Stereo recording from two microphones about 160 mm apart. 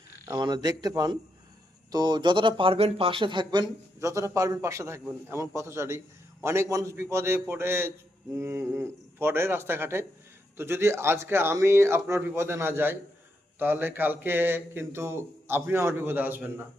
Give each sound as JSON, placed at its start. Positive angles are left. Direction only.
{"t": 0.3, "sound": "a man's voice", "side_deg": -20}